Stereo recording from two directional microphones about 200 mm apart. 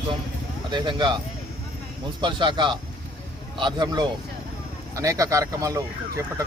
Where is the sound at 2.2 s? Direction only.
25° right (ahead or behind).